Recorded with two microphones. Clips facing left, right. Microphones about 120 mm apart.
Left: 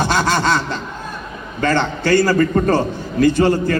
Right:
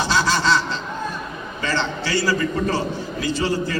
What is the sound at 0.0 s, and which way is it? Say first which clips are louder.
Snicker: left 3 dB; 55° left (ahead or behind).